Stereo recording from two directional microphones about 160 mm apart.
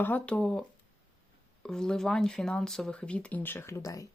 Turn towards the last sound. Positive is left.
turn(degrees=20)  # may be behind; listen again after turning